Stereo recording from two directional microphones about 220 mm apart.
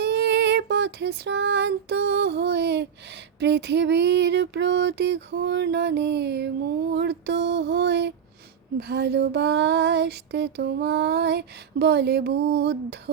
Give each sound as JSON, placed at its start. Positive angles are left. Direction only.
{"t": 0.0, "sound": "child singing", "side_deg": -50}